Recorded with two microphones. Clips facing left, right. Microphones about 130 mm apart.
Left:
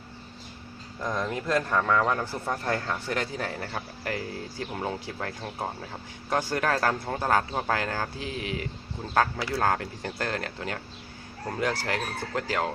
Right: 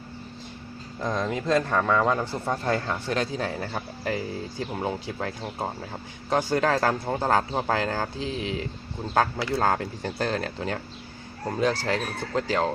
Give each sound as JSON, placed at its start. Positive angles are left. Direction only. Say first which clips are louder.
{"t": 0.9, "sound": "a man's voice", "louder": "right 2 dB", "side_deg": -20}